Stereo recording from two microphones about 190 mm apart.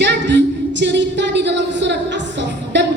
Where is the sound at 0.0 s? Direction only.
65° right (ahead or behind).